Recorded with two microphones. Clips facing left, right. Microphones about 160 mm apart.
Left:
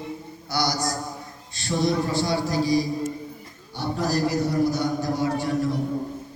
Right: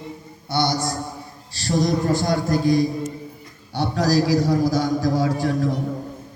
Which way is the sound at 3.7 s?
80° right.